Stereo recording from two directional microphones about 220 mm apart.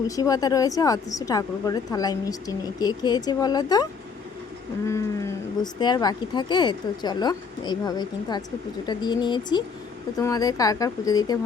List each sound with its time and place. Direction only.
0.2 s speech: 15° left (ahead or behind)
5.8 s speech: 20° left (ahead or behind)